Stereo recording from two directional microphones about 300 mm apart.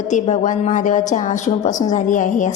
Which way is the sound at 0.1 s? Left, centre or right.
Left.